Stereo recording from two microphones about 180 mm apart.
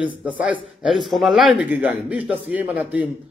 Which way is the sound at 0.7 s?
Centre (ahead or behind).